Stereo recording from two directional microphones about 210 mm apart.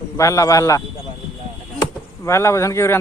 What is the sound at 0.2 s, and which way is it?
Speech, 15° left (ahead or behind).